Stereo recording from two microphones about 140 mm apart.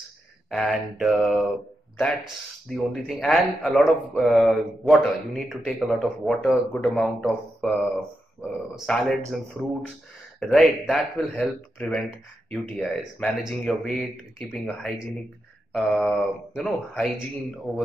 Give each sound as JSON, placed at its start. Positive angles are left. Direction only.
{"t": 0.5, "sound": "speech", "side_deg": 0}
{"t": 2.7, "sound": "speech", "side_deg": 0}
{"t": 15.7, "sound": "speech", "side_deg": 0}